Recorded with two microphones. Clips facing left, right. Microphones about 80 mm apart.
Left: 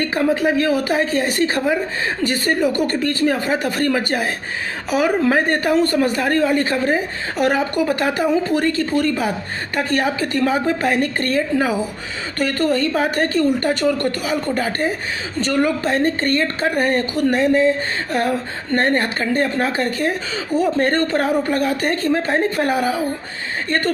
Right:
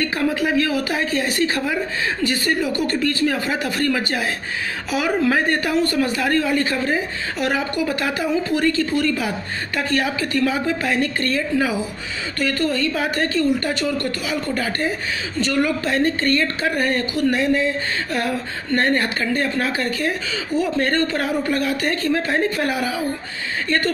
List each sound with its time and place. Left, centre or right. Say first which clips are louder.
0.0 s a woman's voice: left 3 dB; left